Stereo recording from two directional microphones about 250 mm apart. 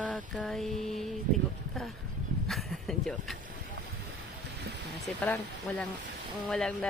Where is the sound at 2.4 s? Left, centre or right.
Centre.